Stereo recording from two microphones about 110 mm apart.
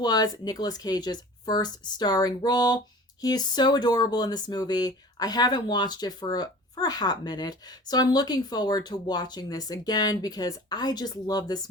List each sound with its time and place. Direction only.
0.0 s speech: 40° left (ahead or behind)